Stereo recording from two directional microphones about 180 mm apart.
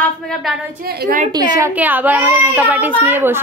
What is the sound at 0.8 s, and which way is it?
Speech, 60° right (ahead or behind).